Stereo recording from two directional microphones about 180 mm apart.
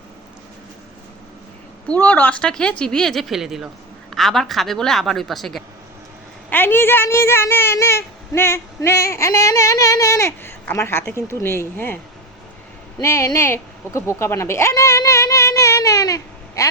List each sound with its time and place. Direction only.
1.9 s speech: 10° left (ahead or behind)
6.5 s a woman's voice: 10° left (ahead or behind)
13.0 s a sound: 15° left (ahead or behind)